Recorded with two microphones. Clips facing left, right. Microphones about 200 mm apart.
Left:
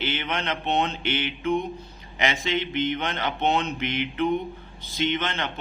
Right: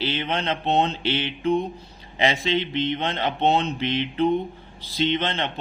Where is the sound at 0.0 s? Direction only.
30° right (ahead or behind).